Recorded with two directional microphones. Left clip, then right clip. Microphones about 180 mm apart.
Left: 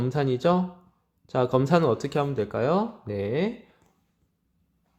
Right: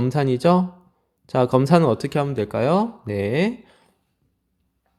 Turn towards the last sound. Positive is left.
turn(degrees=-45)  # may be behind; listen again after turning